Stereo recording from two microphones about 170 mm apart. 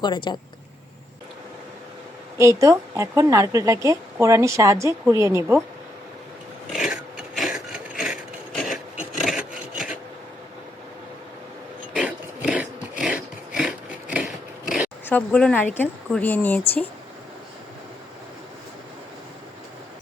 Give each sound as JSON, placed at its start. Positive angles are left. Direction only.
{"t": 0.0, "sound": "speech", "side_deg": 25}
{"t": 2.4, "sound": "speech", "side_deg": -20}
{"t": 6.7, "sound": "filing", "side_deg": 0}
{"t": 8.5, "sound": "rub", "side_deg": 0}
{"t": 9.2, "sound": "filing", "side_deg": 0}
{"t": 12.5, "sound": "a sound", "side_deg": -5}
{"t": 15.0, "sound": "speech", "side_deg": 10}